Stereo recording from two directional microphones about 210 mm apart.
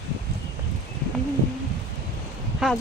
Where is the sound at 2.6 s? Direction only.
Centre (ahead or behind).